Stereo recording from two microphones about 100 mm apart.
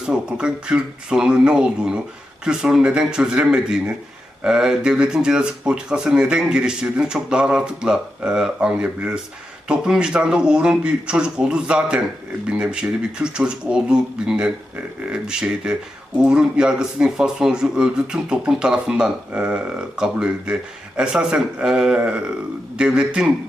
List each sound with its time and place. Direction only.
0.0 s speech: 10° right (ahead or behind)